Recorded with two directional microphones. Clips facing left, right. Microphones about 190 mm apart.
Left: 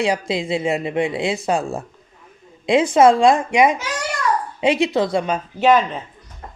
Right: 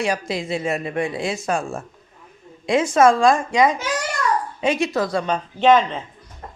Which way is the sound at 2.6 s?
30° left (ahead or behind).